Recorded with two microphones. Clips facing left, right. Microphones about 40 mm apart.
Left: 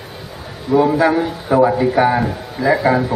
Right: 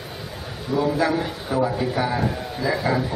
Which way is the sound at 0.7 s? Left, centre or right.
Left.